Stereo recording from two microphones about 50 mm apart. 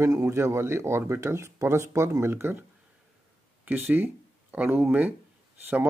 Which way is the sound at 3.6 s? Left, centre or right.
Right.